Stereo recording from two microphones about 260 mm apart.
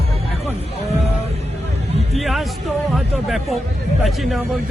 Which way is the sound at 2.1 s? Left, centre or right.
Centre.